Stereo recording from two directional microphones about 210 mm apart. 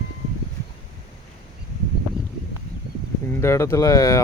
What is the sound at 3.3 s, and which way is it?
Speech, 15° left (ahead or behind).